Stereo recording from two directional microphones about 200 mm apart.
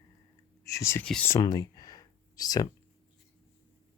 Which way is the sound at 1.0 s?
5° left (ahead or behind).